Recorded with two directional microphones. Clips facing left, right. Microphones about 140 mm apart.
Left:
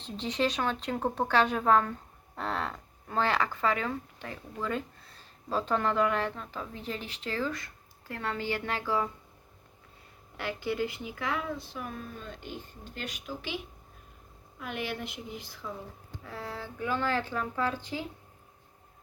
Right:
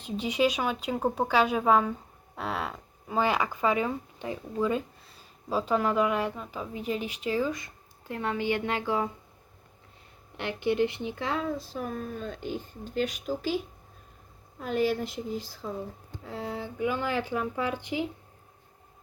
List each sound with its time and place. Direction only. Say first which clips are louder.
0.0 s speech: right 4 dB; 10° right (ahead or behind)
10.3 s speech: right 5 dB; 20° right (ahead or behind); by 13.6 s 40° right (ahead or behind)
14.6 s speech: right 9 dB; 35° right (ahead or behind)
16.2 s speech: right 5 dB; 20° right (ahead or behind)